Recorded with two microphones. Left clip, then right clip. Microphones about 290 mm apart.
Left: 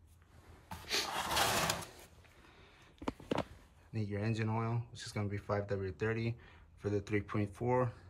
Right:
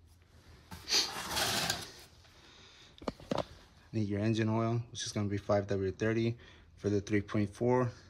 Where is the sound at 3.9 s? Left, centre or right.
Centre.